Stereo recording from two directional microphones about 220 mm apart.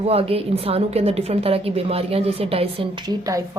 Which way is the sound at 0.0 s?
25° right (ahead or behind).